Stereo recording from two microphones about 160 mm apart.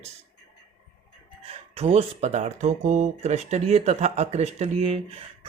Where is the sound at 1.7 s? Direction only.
40° right (ahead or behind).